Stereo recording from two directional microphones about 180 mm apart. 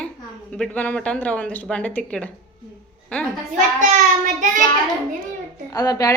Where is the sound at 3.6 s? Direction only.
45° right (ahead or behind).